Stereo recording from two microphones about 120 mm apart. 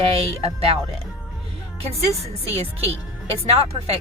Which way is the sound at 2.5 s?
55° right (ahead or behind).